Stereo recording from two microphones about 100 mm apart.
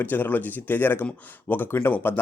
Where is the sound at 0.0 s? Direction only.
20° left (ahead or behind).